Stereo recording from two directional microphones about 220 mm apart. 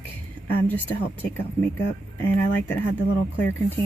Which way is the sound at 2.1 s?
10° left (ahead or behind).